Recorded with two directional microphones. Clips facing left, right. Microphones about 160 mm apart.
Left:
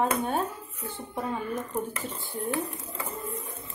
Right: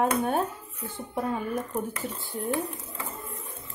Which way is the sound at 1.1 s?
10° right (ahead or behind).